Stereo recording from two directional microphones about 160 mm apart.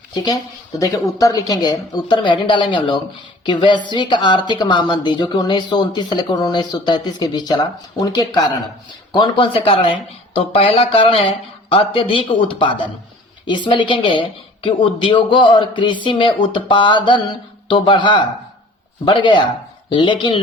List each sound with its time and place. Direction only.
0.1 s a woman's voice: 25° left (ahead or behind)